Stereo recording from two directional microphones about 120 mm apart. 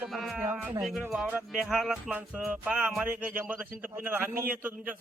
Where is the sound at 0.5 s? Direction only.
5° right (ahead or behind).